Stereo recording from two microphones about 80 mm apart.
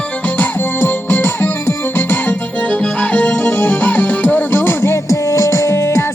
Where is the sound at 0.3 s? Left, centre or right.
Left.